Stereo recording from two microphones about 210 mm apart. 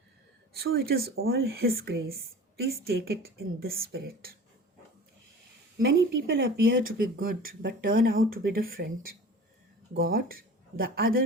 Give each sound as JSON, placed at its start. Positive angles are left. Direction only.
{"t": 0.6, "sound": "speech", "side_deg": -45}
{"t": 5.8, "sound": "a woman's voice", "side_deg": -55}
{"t": 6.6, "sound": "speech", "side_deg": -45}